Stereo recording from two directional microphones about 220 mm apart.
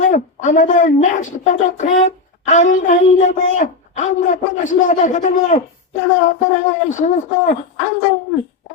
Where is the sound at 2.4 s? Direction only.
35° left (ahead or behind).